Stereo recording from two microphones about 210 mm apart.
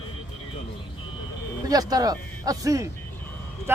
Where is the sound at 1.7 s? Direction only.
20° right (ahead or behind).